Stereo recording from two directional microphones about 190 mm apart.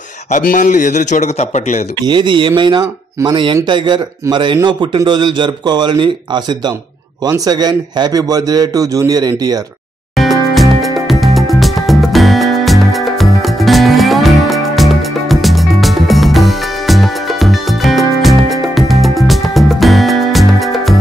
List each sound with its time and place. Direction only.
0.3 s a man's voice: 45° left (ahead or behind)
2.0 s speech: 25° right (ahead or behind)
10.1 s music: centre (ahead or behind)